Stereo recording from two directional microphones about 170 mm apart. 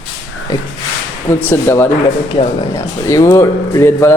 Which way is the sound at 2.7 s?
20° left (ahead or behind).